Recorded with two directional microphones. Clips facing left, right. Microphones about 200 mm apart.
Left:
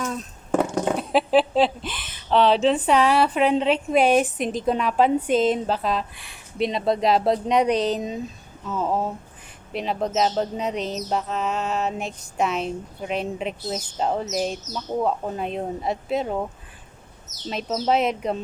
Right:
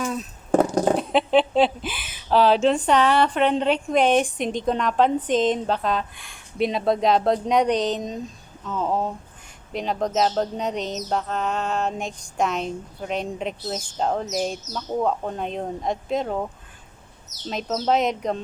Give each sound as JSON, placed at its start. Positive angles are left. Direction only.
{"t": 0.0, "sound": "a sound", "side_deg": -10}
{"t": 0.5, "sound": "goat", "side_deg": -35}
{"t": 0.9, "sound": "a woman's voice", "side_deg": 5}
{"t": 17.5, "sound": "a woman's voice", "side_deg": 0}